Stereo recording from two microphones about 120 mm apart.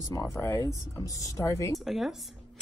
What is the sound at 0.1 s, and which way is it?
Speech, 25° left (ahead or behind).